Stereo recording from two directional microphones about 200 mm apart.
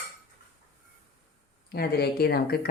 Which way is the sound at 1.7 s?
50° left (ahead or behind).